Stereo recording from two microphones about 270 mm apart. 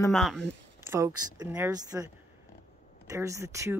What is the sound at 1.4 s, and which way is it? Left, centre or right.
Speech, centre.